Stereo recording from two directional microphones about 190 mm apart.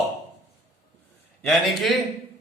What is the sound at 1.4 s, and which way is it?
Speech, centre (ahead or behind).